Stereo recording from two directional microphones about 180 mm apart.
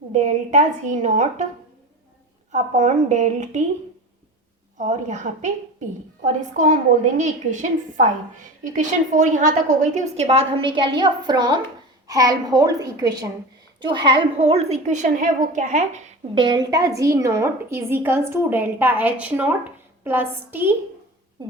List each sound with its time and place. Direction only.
0.1 s a woman's voice: 40° right (ahead or behind)
2.5 s a woman's voice: 45° right (ahead or behind)
4.8 s a woman's voice: 40° right (ahead or behind); by 20.7 s 10° right (ahead or behind)